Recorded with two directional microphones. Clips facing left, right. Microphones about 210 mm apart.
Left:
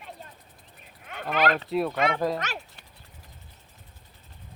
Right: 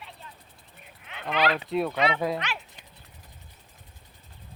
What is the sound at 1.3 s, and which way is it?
Speech, 45° left (ahead or behind).